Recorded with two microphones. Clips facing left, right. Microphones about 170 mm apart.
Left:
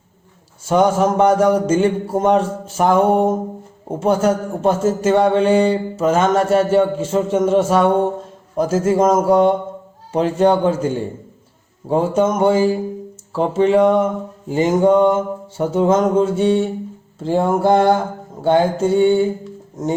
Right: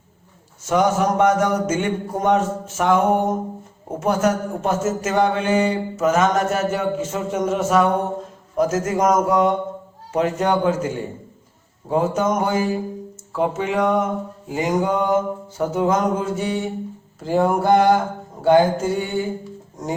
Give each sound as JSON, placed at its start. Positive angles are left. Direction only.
{"t": 0.6, "sound": "a man's voice", "side_deg": 30}
{"t": 14.5, "sound": "mantra", "side_deg": 30}